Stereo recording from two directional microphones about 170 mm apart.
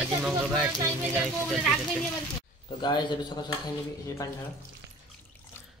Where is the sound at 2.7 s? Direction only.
25° left (ahead or behind).